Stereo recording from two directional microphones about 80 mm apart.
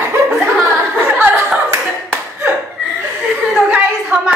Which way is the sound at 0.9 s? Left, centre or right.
Right.